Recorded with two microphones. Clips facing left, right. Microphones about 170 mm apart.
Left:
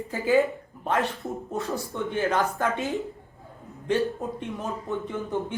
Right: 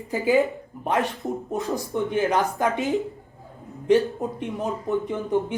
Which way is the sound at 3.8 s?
15° right (ahead or behind).